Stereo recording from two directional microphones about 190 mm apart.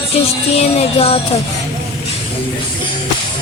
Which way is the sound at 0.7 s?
30° left (ahead or behind).